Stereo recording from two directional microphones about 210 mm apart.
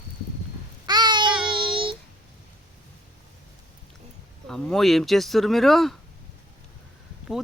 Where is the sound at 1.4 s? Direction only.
25° right (ahead or behind).